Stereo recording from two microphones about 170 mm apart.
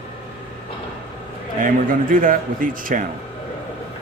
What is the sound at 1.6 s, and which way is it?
A man's voice, 55° right (ahead or behind).